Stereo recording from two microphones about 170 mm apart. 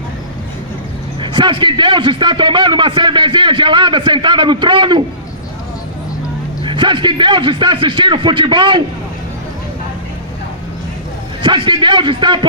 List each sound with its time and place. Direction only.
1.2 s a man's voice: 30° right (ahead or behind)
6.7 s a man's voice: 30° right (ahead or behind)
11.4 s a man's voice: 30° right (ahead or behind)